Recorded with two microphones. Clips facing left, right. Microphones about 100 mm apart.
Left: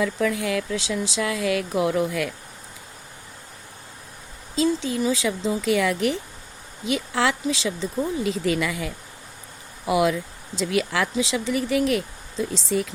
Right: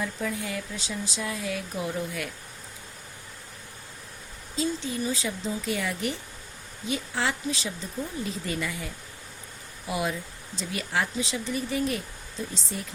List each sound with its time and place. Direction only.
0.0 s speech: 90° left
4.5 s speech: 90° left